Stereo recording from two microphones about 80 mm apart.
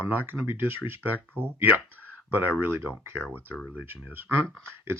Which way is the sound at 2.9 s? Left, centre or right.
Centre.